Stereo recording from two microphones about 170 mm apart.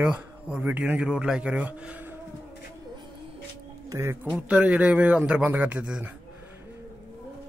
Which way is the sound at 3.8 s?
15° right (ahead or behind).